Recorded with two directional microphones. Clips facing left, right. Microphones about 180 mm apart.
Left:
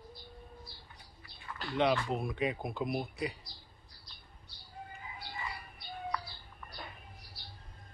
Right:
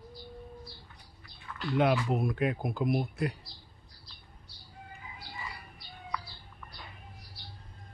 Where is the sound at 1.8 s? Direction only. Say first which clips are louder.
Right 3 dB; 5° right (ahead or behind).